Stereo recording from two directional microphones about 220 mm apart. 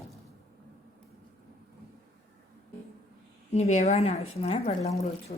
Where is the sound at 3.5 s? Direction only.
30° left (ahead or behind).